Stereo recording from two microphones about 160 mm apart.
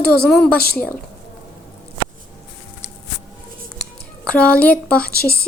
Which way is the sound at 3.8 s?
5° left (ahead or behind).